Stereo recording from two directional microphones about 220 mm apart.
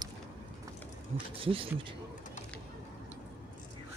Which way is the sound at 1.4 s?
25° right (ahead or behind).